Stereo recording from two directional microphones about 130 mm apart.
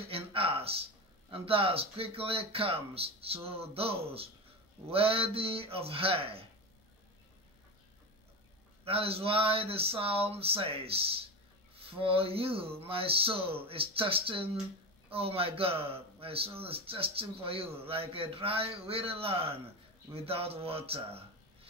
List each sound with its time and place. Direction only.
0.1 s a sound: 45° right (ahead or behind)
1.3 s speech: 45° right (ahead or behind)
8.8 s speech: 50° right (ahead or behind)